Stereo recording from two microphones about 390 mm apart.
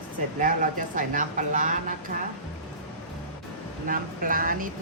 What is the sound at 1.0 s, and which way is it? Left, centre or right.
Speech, centre.